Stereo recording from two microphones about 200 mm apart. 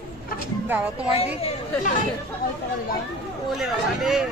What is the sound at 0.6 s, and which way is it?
Speech, 10° right (ahead or behind).